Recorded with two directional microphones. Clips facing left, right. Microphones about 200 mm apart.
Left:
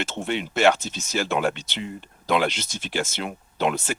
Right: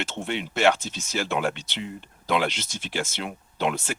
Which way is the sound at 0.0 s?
45° left (ahead or behind).